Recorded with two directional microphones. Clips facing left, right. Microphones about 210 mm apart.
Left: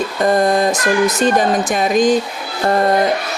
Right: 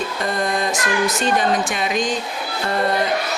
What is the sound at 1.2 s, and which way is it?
Speech, 45° left (ahead or behind).